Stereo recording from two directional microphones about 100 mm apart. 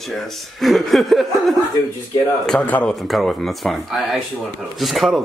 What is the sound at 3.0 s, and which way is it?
Speech, centre (ahead or behind).